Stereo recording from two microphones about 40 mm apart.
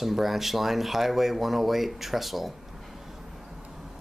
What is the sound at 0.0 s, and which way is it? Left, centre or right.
Speech, centre.